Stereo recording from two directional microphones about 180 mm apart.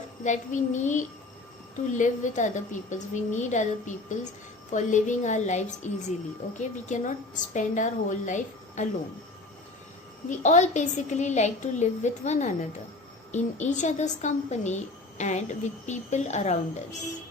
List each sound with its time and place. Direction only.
0.3 s a woman's voice: 40° left (ahead or behind)
10.2 s a woman's voice: 40° left (ahead or behind)